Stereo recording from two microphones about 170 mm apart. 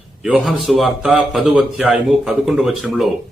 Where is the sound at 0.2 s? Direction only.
5° right (ahead or behind).